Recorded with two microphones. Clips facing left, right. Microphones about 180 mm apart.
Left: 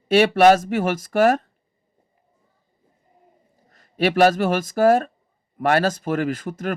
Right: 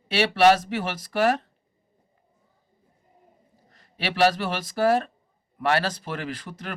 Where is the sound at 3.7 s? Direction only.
45° left (ahead or behind).